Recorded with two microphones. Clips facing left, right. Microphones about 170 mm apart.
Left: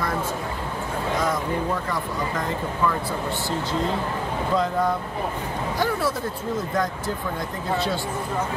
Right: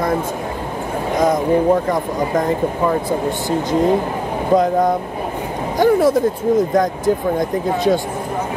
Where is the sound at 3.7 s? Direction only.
15° right (ahead or behind).